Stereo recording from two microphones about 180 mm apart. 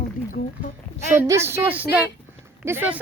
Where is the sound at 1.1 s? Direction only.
15° right (ahead or behind).